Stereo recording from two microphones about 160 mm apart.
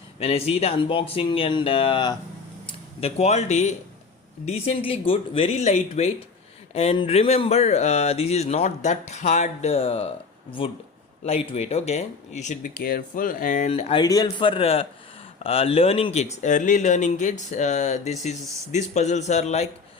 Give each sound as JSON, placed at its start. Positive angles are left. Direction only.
{"t": 0.2, "sound": "speech", "side_deg": 40}
{"t": 13.7, "sound": "speech", "side_deg": 40}
{"t": 14.0, "sound": "speech", "side_deg": 25}